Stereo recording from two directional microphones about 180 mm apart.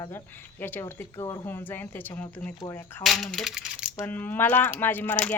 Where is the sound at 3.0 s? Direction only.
Centre (ahead or behind).